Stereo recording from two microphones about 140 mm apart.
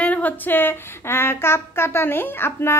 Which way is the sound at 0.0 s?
10° left (ahead or behind).